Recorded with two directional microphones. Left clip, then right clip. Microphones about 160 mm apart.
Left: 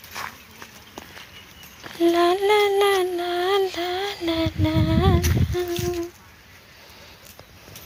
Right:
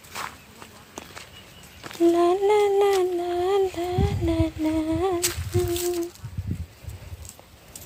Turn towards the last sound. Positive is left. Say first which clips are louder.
# even
turn(degrees=-20)  # may be behind; listen again after turning